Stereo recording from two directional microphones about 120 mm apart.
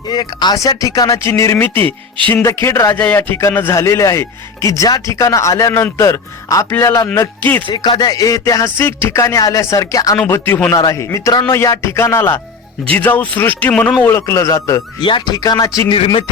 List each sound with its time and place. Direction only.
0.1 s speech: 35° left (ahead or behind); by 7.6 s 15° left (ahead or behind)
7.7 s speech: 35° left (ahead or behind)
10.2 s speech: 20° left (ahead or behind)
10.8 s a man's voice: 30° left (ahead or behind)
15.0 s speech: 40° left (ahead or behind)
15.9 s speech: 45° left (ahead or behind)